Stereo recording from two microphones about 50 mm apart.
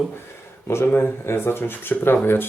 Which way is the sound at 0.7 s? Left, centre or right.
Left.